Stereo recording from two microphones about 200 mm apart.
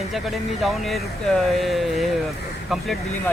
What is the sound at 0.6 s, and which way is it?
Speech, centre (ahead or behind).